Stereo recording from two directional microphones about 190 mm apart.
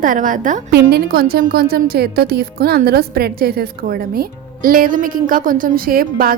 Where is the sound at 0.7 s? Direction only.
55° right (ahead or behind).